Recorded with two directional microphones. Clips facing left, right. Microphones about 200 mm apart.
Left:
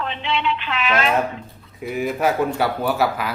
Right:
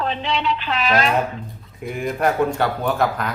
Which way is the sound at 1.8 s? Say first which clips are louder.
Left 1 dB; 5° left (ahead or behind).